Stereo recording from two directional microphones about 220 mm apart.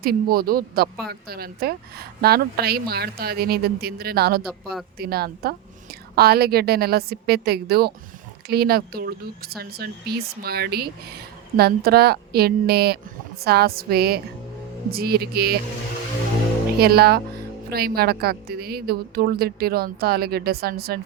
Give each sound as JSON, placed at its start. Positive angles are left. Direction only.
{"t": 0.0, "sound": "a woman's voice", "side_deg": -45}
{"t": 16.8, "sound": "a woman's voice", "side_deg": -45}